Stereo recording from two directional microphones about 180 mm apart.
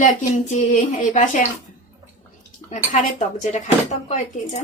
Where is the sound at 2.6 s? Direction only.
40° left (ahead or behind).